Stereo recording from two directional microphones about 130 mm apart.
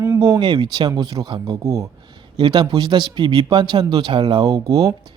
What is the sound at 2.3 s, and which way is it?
Speech, 35° right (ahead or behind).